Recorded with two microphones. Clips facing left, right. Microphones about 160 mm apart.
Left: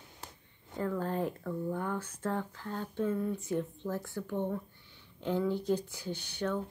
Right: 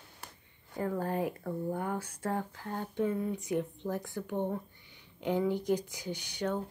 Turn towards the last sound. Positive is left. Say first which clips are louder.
# even
turn(degrees=-15)  # may be behind; listen again after turning